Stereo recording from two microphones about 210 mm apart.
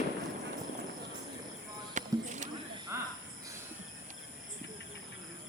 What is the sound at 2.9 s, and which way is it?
Cricket, 15° right (ahead or behind).